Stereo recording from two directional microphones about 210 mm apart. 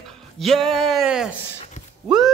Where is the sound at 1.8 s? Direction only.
35° left (ahead or behind).